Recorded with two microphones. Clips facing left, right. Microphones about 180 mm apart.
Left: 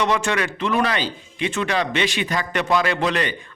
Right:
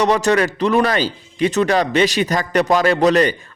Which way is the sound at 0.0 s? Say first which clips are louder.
Right 6 dB; 40° right (ahead or behind).